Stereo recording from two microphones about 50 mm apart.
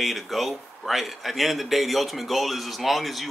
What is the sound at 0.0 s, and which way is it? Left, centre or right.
A man's voice, centre.